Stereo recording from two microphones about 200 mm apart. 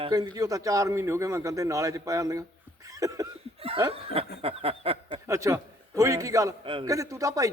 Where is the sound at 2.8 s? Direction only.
15° right (ahead or behind).